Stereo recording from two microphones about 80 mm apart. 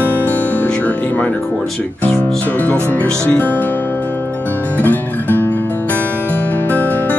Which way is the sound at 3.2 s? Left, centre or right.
Left.